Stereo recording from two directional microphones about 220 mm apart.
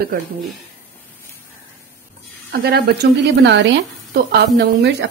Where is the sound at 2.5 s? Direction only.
45° right (ahead or behind).